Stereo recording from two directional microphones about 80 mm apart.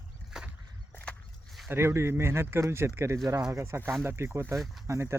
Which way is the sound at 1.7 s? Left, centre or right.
Right.